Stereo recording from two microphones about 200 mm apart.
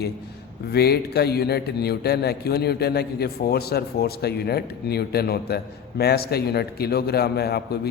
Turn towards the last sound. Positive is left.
turn(degrees=55)  # may be behind; listen again after turning